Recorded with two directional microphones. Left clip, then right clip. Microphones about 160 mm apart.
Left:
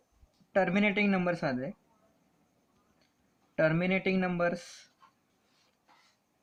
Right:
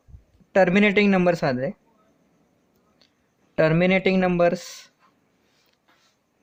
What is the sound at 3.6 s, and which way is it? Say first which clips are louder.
Speech: right 9 dB; 50° right (ahead or behind).